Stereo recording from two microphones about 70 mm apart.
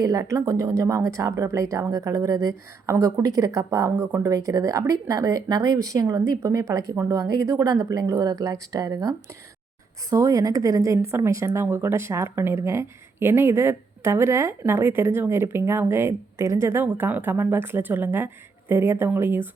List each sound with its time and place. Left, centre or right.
0.0 s a woman's voice: right
16.8 s speech: right